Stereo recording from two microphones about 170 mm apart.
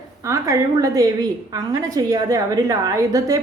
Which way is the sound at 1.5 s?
20° right (ahead or behind).